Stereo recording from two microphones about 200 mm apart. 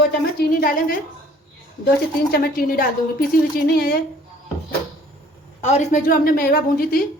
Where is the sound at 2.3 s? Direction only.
50° left (ahead or behind).